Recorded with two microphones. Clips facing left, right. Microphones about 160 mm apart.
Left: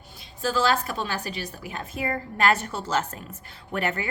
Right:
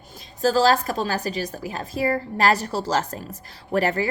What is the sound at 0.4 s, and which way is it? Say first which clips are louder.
A woman's voice: right 5 dB; 40° right (ahead or behind).